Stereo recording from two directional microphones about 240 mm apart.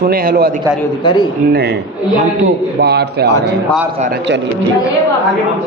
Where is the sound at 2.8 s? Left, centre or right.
Right.